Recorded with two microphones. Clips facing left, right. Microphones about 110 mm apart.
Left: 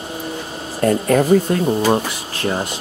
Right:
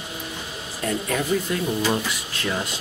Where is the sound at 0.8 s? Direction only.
50° left (ahead or behind).